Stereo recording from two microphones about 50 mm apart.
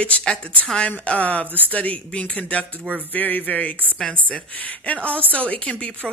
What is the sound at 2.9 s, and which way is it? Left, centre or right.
A woman's voice, left.